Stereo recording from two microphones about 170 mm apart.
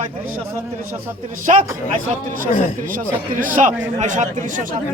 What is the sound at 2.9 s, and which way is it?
Speech, 55° right (ahead or behind).